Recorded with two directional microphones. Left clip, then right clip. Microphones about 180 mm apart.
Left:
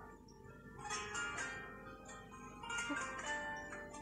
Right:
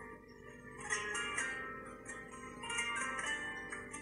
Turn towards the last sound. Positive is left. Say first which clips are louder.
# right 3 dB
turn(degrees=-15)  # may be behind; listen again after turning